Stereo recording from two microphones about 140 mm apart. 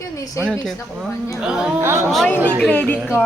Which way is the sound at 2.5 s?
10° left (ahead or behind).